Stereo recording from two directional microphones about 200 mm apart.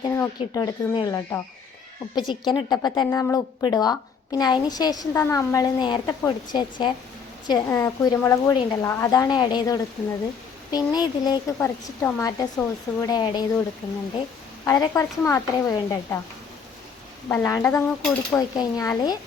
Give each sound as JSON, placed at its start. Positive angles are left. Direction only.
{"t": 0.0, "sound": "a woman's voice", "side_deg": 15}
{"t": 14.6, "sound": "speech", "side_deg": 15}
{"t": 17.2, "sound": "speech", "side_deg": 15}
{"t": 18.3, "sound": "a woman's voice", "side_deg": 15}